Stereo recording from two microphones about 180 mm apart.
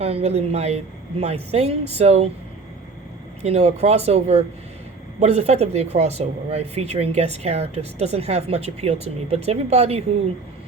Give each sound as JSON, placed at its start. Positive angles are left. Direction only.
{"t": 0.0, "sound": "speech", "side_deg": -35}
{"t": 3.4, "sound": "speech", "side_deg": -35}